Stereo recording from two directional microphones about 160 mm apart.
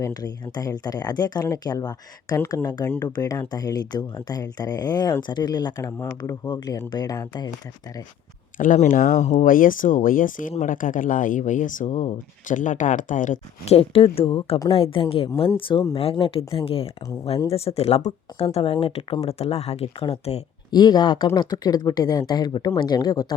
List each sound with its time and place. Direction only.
0.0 s speech: 25° left (ahead or behind)
8.5 s speech: 55° left (ahead or behind)
13.7 s speech: 35° left (ahead or behind)
20.7 s speech: 25° left (ahead or behind)